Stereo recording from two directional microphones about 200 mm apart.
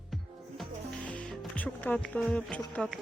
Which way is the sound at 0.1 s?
Centre (ahead or behind).